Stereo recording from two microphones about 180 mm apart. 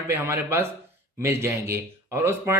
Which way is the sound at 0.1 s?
15° right (ahead or behind).